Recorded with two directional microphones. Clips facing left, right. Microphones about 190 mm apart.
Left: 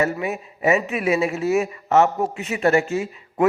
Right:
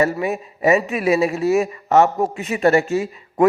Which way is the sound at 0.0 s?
35° right (ahead or behind).